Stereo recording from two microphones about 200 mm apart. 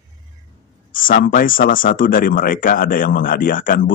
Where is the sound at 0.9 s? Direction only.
45° left (ahead or behind).